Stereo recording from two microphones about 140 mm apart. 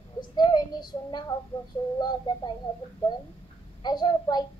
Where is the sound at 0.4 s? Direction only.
30° left (ahead or behind).